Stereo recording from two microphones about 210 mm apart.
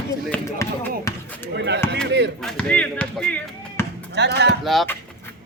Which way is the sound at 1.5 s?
55° right (ahead or behind).